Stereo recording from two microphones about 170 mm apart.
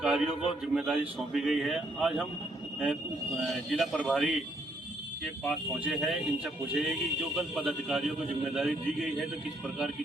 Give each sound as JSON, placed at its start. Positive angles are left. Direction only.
{"t": 0.0, "sound": "a man's voice", "side_deg": -5}
{"t": 3.4, "sound": "a man's voice", "side_deg": 0}
{"t": 5.4, "sound": "a man's voice", "side_deg": 0}